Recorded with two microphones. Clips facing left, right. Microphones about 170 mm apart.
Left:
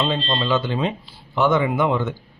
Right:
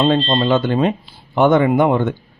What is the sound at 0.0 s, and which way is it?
A man's voice, 55° right (ahead or behind).